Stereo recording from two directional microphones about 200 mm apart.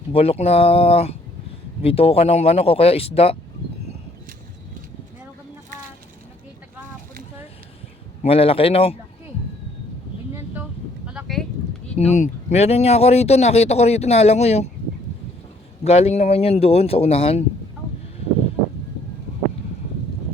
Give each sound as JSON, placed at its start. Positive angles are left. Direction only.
{"t": 0.1, "sound": "speech", "side_deg": 30}
{"t": 8.2, "sound": "speech", "side_deg": 30}
{"t": 11.0, "sound": "a sound", "side_deg": -5}
{"t": 11.9, "sound": "speech", "side_deg": 35}
{"t": 15.8, "sound": "speech", "side_deg": 30}